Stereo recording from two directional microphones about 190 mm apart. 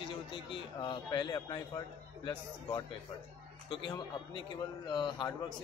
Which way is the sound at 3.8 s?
25° left (ahead or behind).